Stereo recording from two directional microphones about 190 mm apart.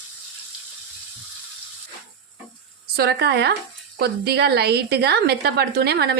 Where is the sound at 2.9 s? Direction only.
60° right (ahead or behind).